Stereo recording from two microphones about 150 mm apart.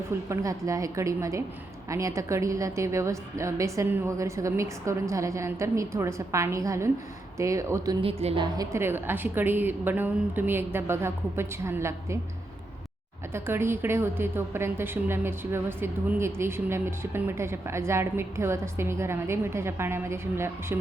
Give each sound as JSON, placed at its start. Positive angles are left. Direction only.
{"t": 0.3, "sound": "a woman's voice", "side_deg": -20}
{"t": 8.0, "sound": "a woman's voice", "side_deg": -40}
{"t": 8.5, "sound": "a woman's voice", "side_deg": -15}
{"t": 13.3, "sound": "a woman's voice", "side_deg": -15}